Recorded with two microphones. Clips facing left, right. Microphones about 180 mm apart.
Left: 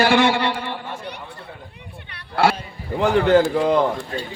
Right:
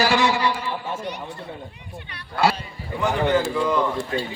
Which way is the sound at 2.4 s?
75° left (ahead or behind).